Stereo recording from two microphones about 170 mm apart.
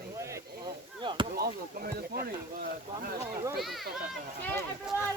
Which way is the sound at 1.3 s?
65° right (ahead or behind).